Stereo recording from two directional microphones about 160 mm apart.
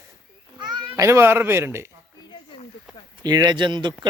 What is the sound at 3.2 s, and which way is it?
Speech, 25° right (ahead or behind).